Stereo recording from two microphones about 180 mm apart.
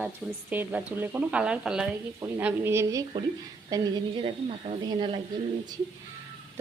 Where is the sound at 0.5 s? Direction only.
10° right (ahead or behind); by 5.1 s 30° right (ahead or behind).